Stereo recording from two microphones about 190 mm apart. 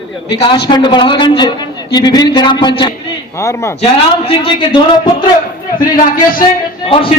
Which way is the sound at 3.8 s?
30° left (ahead or behind).